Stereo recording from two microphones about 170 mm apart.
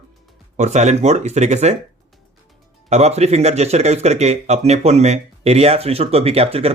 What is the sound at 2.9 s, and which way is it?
Speech, 40° right (ahead or behind).